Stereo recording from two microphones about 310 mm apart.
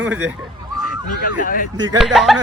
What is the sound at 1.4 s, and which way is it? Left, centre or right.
Speech, left.